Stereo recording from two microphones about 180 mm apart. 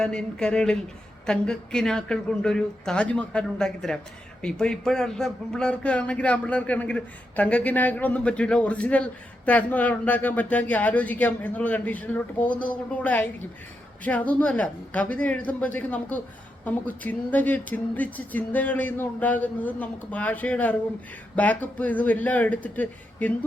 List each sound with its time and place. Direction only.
0.0 s a man's voice: 5° left (ahead or behind)